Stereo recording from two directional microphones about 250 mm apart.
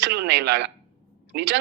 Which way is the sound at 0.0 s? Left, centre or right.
Right.